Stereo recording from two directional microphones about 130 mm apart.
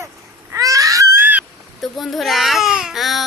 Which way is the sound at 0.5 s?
25° right (ahead or behind).